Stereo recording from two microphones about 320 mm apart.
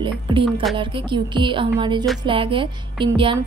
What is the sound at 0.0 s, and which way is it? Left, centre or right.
A woman's voice, centre.